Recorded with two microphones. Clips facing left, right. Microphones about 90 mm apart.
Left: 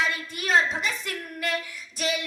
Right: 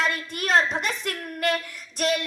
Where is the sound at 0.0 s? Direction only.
55° right (ahead or behind).